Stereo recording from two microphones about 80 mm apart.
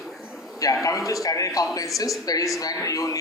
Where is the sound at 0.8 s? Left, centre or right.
Left.